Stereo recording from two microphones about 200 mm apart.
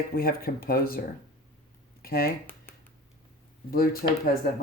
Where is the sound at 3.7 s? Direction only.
50° left (ahead or behind).